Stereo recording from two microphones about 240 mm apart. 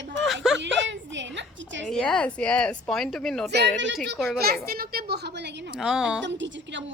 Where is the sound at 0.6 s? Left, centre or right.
Right.